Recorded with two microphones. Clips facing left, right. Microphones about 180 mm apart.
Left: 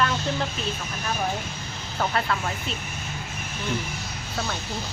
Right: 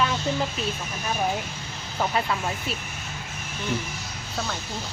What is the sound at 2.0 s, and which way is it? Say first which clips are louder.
Speech: even; 15° right (ahead or behind).